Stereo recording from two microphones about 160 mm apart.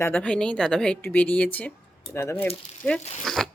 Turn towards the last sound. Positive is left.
turn(degrees=0)  # may be behind; listen again after turning